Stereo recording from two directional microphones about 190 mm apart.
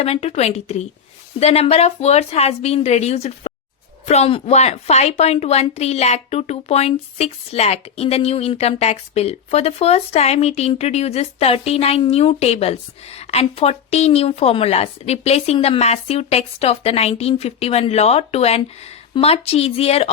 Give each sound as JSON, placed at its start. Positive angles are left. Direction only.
{"t": 0.0, "sound": "a woman's voice", "side_deg": 35}